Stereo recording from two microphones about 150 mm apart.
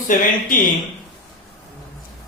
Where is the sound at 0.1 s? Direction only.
65° left (ahead or behind).